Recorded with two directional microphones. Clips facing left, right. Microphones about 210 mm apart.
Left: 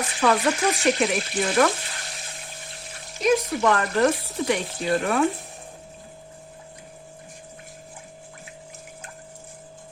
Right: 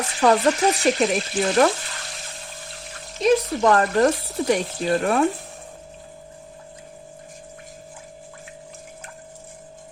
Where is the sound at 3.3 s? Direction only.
35° right (ahead or behind).